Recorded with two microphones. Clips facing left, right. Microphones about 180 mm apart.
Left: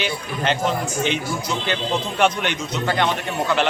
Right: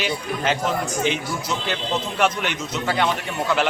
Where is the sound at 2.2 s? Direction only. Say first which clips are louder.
Left 3 dB; 5° right (ahead or behind).